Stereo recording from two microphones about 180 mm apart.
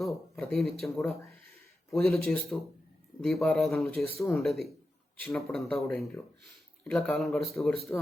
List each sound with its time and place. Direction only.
0.0 s speech: centre (ahead or behind)